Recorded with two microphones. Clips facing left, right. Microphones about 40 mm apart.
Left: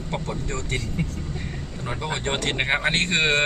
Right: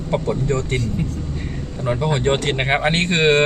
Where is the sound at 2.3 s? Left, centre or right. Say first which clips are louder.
Right 4 dB; centre.